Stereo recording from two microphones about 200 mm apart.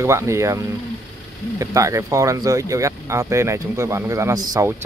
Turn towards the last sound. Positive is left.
turn(degrees=-15)  # may be behind; listen again after turning